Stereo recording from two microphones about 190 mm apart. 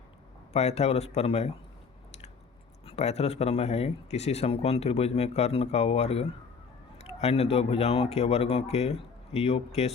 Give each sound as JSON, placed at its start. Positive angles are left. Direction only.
{"t": 0.5, "sound": "speech", "side_deg": 35}
{"t": 2.8, "sound": "speech", "side_deg": 35}